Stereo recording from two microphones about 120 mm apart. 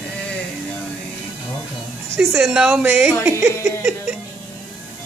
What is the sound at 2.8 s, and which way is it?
Speech, 15° right (ahead or behind).